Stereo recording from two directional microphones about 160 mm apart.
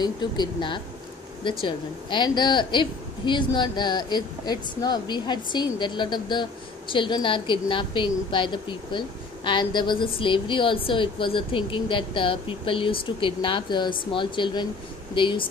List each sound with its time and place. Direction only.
0.0 s speech: 30° left (ahead or behind)